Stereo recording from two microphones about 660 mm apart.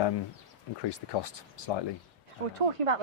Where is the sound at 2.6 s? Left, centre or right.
Right.